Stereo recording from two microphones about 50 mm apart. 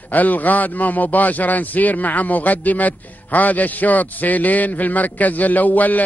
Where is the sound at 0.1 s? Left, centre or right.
Left.